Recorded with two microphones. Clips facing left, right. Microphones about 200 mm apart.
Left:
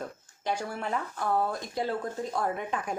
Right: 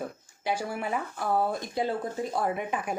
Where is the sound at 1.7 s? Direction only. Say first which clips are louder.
Right 2 dB; 20° right (ahead or behind).